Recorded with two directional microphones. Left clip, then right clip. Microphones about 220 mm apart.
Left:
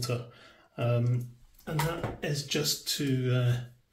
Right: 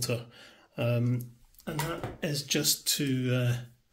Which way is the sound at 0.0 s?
45° right (ahead or behind).